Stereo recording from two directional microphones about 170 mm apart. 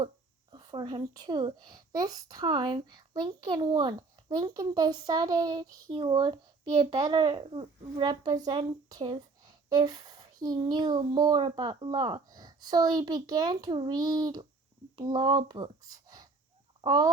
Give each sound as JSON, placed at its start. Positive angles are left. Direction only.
{"t": 0.5, "sound": "speech", "side_deg": -25}